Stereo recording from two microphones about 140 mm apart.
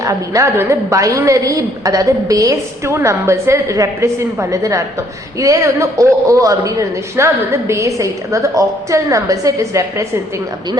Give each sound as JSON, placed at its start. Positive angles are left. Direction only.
{"t": 0.0, "sound": "a woman's voice", "side_deg": -25}